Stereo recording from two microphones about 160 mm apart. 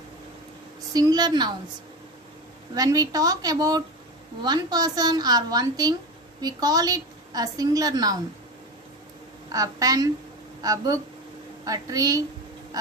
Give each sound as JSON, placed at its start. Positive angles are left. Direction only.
{"t": 0.9, "sound": "a woman's voice", "side_deg": -25}
{"t": 2.7, "sound": "a woman's voice", "side_deg": -20}
{"t": 9.5, "sound": "a woman's voice", "side_deg": -20}